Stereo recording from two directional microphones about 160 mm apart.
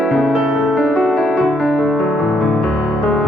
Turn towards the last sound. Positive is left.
turn(degrees=0)  # may be behind; listen again after turning